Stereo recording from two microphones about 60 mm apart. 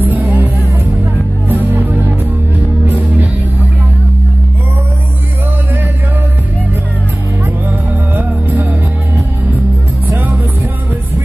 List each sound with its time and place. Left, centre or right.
0.0 s music: right
1.5 s music: right
8.1 s music: right
10.1 s music: right